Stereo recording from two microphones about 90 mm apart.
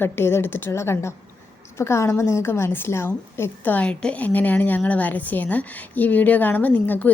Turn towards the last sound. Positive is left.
turn(degrees=15)  # may be behind; listen again after turning